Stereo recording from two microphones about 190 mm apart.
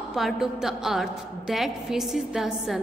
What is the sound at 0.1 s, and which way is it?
A woman's voice, centre (ahead or behind).